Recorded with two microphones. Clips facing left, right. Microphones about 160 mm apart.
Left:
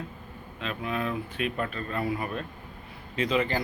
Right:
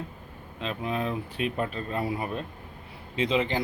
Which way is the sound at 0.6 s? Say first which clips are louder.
Right 1 dB; 30° right (ahead or behind).